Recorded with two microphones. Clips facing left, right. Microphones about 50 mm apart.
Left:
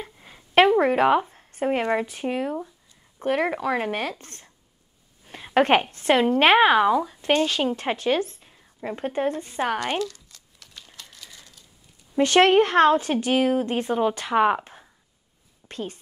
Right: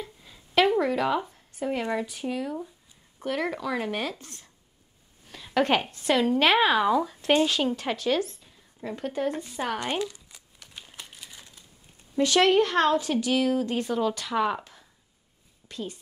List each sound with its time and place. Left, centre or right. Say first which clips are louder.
0.0 s a sound: left 1 dB; left
0.7 s a woman's voice: left 6 dB; left
7.0 s speech: left 1 dB; centre
7.7 s a woman's voice: left 3 dB; left
9.9 s crumpling: left 3 dB; centre
12.2 s a woman's voice: left 4 dB; left